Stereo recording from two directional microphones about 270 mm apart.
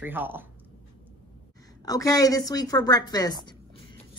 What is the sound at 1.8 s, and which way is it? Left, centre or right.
A woman's voice, centre.